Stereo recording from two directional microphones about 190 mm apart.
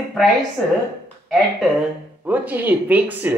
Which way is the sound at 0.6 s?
5° left (ahead or behind).